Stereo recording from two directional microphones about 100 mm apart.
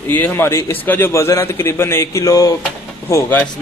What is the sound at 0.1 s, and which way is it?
Speech, 20° left (ahead or behind).